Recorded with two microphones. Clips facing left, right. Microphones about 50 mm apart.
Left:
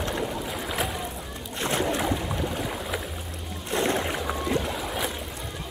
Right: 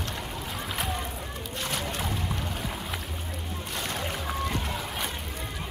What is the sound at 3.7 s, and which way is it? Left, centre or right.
Music, left.